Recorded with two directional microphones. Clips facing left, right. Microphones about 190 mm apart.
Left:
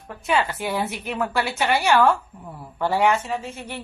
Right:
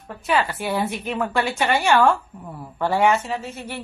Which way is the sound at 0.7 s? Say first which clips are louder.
Right 2 dB; 10° left (ahead or behind).